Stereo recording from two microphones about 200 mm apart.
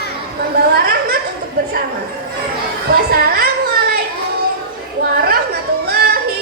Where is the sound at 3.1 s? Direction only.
50° right (ahead or behind).